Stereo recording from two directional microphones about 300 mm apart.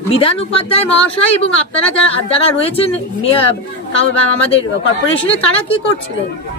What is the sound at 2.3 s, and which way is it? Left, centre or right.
A woman's voice, centre.